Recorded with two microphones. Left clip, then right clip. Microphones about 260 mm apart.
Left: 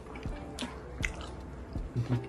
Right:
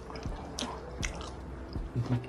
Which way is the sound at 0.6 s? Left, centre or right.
Centre.